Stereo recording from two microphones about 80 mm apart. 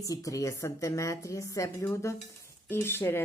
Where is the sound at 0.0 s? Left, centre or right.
Left.